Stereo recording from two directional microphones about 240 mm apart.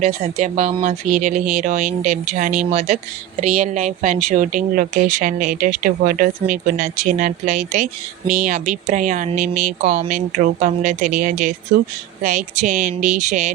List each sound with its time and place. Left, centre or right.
0.0 s speech: right